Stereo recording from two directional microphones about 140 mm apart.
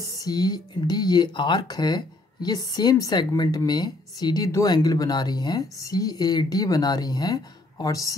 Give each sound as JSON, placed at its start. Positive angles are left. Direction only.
{"t": 0.0, "sound": "speech", "side_deg": 25}